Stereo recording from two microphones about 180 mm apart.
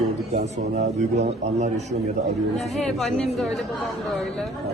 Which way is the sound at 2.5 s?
Centre (ahead or behind).